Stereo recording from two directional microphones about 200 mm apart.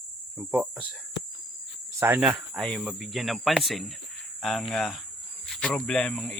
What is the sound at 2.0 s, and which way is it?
Speech, 10° right (ahead or behind).